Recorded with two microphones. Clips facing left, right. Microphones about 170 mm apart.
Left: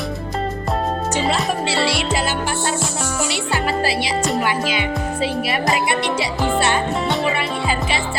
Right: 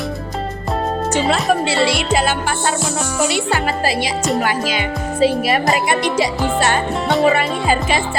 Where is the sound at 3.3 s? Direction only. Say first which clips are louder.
Right 3 dB; 50° right (ahead or behind).